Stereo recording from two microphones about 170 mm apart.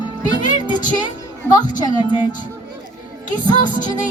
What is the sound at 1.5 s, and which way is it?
Speech, 25° left (ahead or behind).